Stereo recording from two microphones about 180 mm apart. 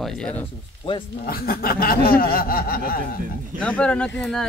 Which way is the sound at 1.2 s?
55° left (ahead or behind).